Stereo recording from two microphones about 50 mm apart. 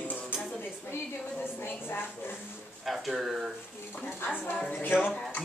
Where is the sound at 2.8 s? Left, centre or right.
Centre.